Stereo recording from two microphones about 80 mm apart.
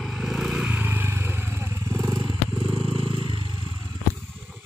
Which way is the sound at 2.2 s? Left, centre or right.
Right.